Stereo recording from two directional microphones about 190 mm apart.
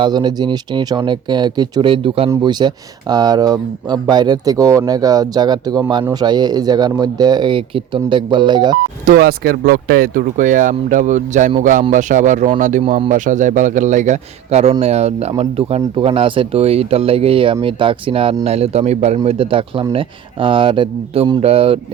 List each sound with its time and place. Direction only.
0.0 s speech: 25° right (ahead or behind)
9.0 s a man's voice: 55° right (ahead or behind); by 21.8 s 30° right (ahead or behind)